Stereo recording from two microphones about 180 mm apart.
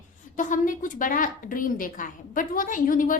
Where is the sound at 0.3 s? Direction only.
45° left (ahead or behind).